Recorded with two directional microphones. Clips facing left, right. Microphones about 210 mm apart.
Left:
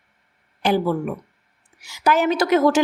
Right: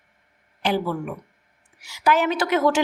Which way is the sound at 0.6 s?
45° left (ahead or behind).